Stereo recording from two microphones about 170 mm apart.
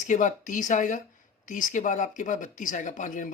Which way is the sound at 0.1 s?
45° left (ahead or behind).